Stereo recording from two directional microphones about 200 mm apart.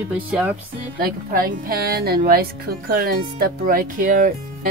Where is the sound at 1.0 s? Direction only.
45° right (ahead or behind).